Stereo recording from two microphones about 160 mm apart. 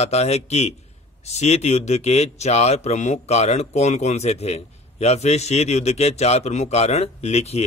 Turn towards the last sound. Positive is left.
turn(degrees=40)  # may be behind; listen again after turning